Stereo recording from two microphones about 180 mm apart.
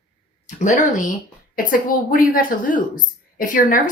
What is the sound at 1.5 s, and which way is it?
Speech, 50° left (ahead or behind).